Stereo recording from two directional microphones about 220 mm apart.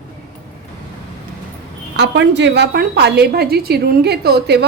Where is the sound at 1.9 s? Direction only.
50° right (ahead or behind).